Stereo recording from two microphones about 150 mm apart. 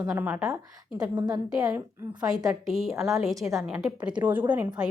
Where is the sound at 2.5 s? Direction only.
Centre (ahead or behind).